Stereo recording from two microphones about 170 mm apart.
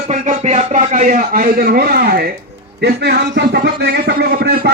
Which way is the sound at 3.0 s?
80° right.